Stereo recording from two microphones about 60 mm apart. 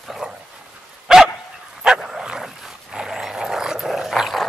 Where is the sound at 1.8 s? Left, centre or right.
Centre.